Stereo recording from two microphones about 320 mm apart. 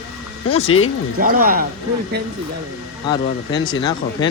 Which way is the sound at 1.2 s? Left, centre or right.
Right.